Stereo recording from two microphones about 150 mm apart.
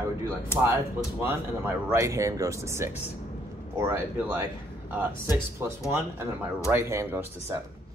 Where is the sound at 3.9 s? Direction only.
20° right (ahead or behind).